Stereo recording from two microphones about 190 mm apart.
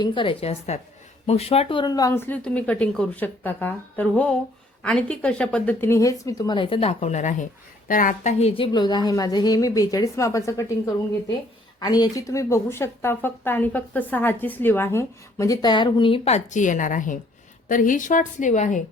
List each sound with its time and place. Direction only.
0.0 s a woman's voice: 25° left (ahead or behind)